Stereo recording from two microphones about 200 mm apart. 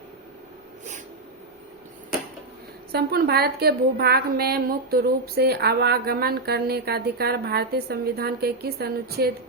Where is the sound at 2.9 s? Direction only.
50° right (ahead or behind).